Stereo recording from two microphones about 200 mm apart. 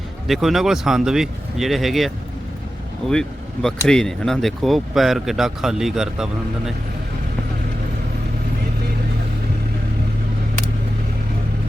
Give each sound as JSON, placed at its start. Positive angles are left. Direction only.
{"t": 0.3, "sound": "speech", "side_deg": 0}